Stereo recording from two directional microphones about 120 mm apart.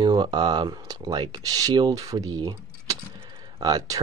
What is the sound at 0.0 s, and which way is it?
Speech, 40° right (ahead or behind).